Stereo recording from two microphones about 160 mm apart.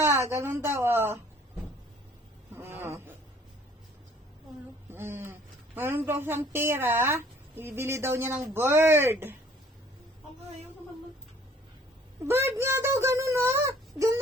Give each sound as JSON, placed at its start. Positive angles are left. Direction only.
{"t": 0.3, "sound": "a woman's voice", "side_deg": -15}
{"t": 2.6, "sound": "a sound", "side_deg": -15}
{"t": 4.9, "sound": "a woman's voice", "side_deg": -15}
{"t": 12.2, "sound": "a woman's voice", "side_deg": -15}